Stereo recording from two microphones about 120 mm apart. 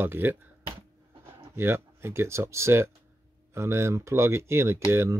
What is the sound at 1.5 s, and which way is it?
Speech, 20° right (ahead or behind).